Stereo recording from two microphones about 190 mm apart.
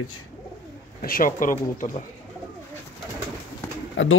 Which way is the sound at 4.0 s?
90° left.